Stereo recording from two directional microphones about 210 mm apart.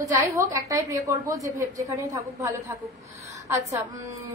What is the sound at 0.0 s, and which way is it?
Female singing, 15° right (ahead or behind).